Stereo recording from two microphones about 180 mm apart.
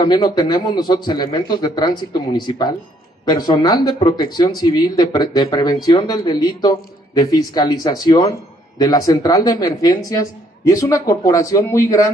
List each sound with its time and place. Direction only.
0.0 s speech: 20° left (ahead or behind)